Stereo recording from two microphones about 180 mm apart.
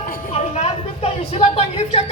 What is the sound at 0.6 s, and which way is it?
Speech, 35° left (ahead or behind).